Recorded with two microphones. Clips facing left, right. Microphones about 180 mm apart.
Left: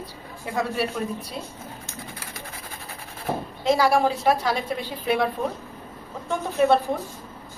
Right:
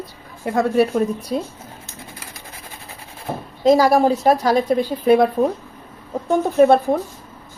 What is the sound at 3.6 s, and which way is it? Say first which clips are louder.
A woman's voice: right 6 dB; 40° right (ahead or behind).